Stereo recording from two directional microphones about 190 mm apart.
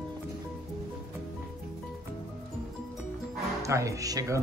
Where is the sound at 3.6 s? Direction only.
15° right (ahead or behind).